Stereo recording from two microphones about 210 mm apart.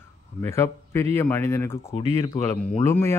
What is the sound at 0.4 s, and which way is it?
Speech, 10° left (ahead or behind).